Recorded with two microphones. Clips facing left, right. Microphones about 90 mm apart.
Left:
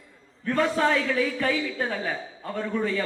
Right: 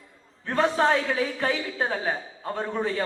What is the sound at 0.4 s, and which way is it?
A man's voice, 40° right (ahead or behind).